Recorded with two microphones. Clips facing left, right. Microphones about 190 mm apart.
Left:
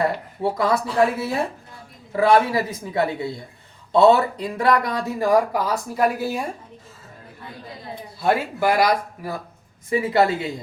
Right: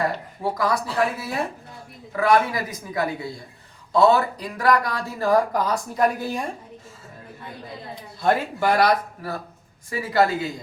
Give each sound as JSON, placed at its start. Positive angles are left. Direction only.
{"t": 0.5, "sound": "speech", "side_deg": 25}
{"t": 8.2, "sound": "speech", "side_deg": 5}
{"t": 9.9, "sound": "speech", "side_deg": 25}